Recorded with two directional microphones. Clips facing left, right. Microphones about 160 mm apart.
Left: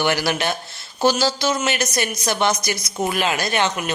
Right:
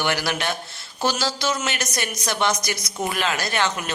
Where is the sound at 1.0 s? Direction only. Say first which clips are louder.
Left 5 dB; 25° left (ahead or behind).